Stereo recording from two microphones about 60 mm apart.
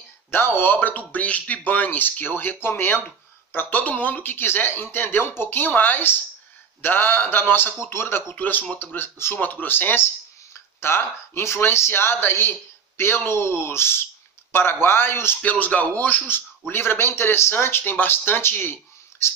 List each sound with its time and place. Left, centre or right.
0.3 s speech: left
8.9 s speech: left
15.4 s speech: left